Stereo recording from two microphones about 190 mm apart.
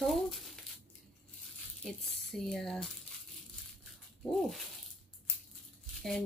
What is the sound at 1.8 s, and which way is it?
Speech, centre (ahead or behind).